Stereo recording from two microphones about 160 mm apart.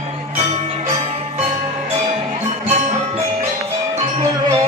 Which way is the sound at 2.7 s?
45° right (ahead or behind).